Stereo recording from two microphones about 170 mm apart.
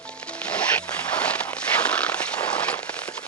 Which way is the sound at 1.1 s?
5° left (ahead or behind).